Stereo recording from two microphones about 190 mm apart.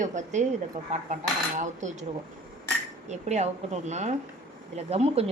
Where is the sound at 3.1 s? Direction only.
35° right (ahead or behind).